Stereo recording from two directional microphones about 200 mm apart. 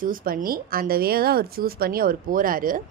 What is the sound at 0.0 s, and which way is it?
A woman's voice, 45° right (ahead or behind).